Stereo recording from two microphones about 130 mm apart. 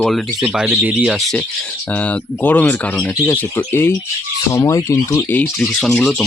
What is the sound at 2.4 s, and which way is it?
Speech, 15° left (ahead or behind).